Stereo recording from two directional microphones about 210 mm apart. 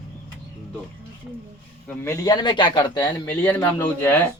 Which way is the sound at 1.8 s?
15° left (ahead or behind).